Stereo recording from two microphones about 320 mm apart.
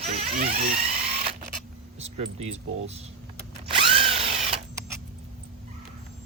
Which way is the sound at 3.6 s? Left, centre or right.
Centre.